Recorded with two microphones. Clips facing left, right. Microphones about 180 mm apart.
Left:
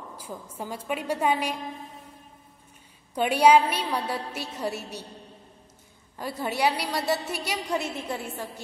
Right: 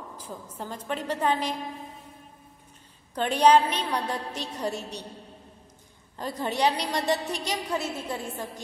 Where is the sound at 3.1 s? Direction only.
10° left (ahead or behind).